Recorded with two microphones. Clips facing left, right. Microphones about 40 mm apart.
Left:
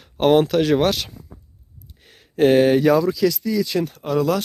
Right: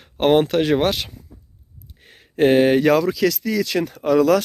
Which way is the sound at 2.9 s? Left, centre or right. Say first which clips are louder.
Even; right.